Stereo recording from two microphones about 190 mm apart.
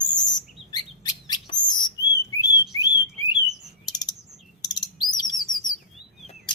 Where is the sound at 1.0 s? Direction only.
20° left (ahead or behind).